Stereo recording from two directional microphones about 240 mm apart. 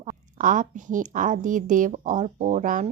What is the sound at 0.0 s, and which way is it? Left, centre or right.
Speech, right.